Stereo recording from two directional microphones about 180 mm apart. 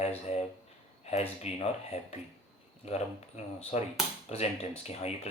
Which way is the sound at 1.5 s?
35° left (ahead or behind).